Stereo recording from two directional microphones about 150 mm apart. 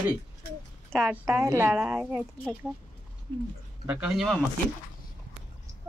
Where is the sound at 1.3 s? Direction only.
20° right (ahead or behind).